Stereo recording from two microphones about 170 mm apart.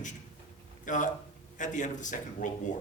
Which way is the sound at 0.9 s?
50° left (ahead or behind).